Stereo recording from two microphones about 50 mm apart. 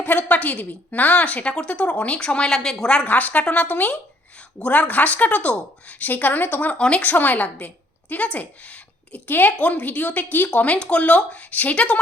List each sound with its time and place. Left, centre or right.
0.0 s a woman's voice: left; by 3.1 s centre
3.1 s a woman's voice: left
6.7 s speech: left
7.1 s a woman's voice: left